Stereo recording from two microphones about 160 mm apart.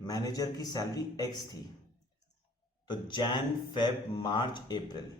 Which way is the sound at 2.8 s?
30° left (ahead or behind).